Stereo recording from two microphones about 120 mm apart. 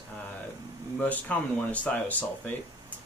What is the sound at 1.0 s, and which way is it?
Speech, 10° left (ahead or behind).